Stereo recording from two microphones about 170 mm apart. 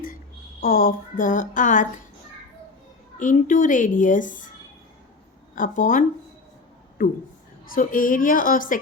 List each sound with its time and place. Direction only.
0.6 s a woman's voice: 55° left (ahead or behind)
3.2 s a woman's voice: 50° left (ahead or behind)
5.5 s a woman's voice: 50° left (ahead or behind)
7.7 s a woman's voice: 55° left (ahead or behind)